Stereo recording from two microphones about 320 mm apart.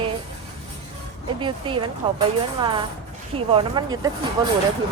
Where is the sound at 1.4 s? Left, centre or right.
Centre.